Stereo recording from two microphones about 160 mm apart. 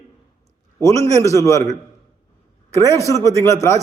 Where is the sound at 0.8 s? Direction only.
20° left (ahead or behind).